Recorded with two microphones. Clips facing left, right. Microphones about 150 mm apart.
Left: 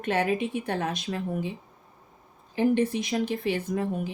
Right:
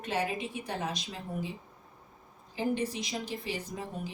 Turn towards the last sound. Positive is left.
turn(degrees=60)  # may be behind; listen again after turning